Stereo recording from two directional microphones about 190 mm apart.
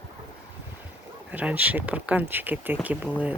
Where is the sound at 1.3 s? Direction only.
10° right (ahead or behind).